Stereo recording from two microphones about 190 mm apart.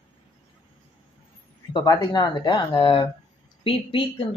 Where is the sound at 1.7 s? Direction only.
20° left (ahead or behind).